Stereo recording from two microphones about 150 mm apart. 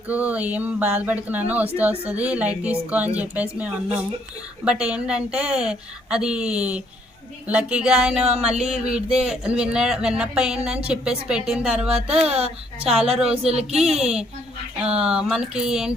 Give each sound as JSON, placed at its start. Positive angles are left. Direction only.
{"t": 0.1, "sound": "speech", "side_deg": -10}
{"t": 11.9, "sound": "speech", "side_deg": -40}
{"t": 13.3, "sound": "speech", "side_deg": -40}
{"t": 13.7, "sound": "speech", "side_deg": -5}